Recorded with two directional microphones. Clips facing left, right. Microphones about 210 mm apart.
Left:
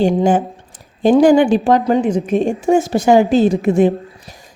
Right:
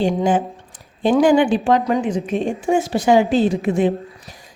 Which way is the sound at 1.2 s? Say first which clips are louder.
Left 2 dB; 40° left (ahead or behind).